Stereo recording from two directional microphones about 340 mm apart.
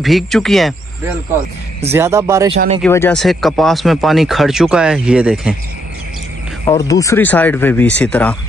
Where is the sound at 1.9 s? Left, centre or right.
Centre.